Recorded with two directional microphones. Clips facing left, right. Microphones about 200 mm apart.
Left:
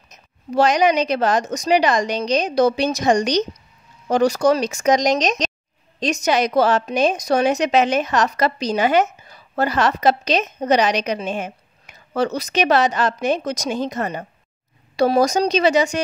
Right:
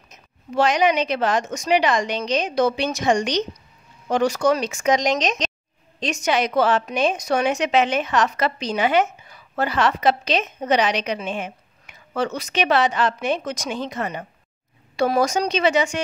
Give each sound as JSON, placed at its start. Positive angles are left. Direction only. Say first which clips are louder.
{"t": 0.1, "sound": "a woman's voice", "louder": "left 4 dB", "side_deg": 40}